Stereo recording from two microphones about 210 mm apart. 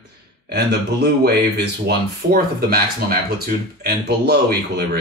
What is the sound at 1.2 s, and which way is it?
Speech, 50° right (ahead or behind).